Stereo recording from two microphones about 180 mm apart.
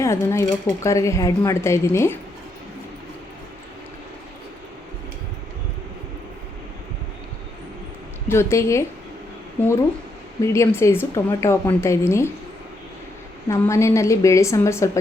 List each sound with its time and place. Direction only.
0.0 s speech: 15° left (ahead or behind)
8.3 s speech: 15° left (ahead or behind)
10.4 s speech: 15° left (ahead or behind)
13.5 s speech: 15° left (ahead or behind)